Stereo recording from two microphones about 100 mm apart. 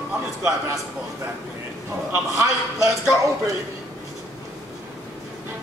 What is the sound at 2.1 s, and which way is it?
Speech, 30° right (ahead or behind).